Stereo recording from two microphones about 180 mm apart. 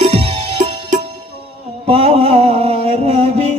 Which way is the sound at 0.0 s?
35° right (ahead or behind).